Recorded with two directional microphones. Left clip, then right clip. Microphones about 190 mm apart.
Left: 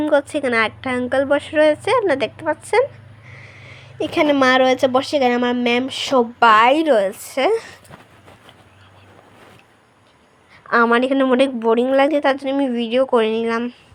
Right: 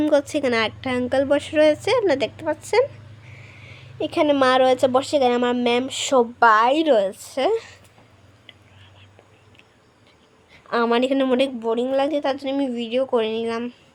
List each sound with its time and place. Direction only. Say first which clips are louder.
0.0 s a woman's voice: left 2 dB; centre (ahead or behind)
10.8 s a woman's voice: left 4 dB; 5° left (ahead or behind)